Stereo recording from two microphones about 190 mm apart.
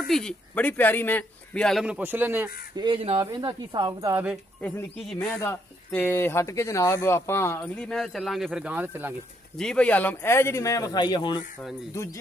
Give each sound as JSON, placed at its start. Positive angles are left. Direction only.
{"t": 0.0, "sound": "speech", "side_deg": 5}
{"t": 2.7, "sound": "speech", "side_deg": -25}
{"t": 4.6, "sound": "speech", "side_deg": 5}
{"t": 9.6, "sound": "speech", "side_deg": 5}